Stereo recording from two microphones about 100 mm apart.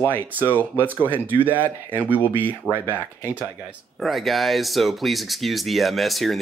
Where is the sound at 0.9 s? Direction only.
20° right (ahead or behind).